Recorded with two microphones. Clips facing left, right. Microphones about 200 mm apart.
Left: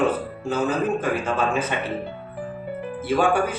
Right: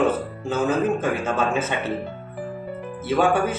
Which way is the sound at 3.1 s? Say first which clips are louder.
Right 1 dB; 25° right (ahead or behind).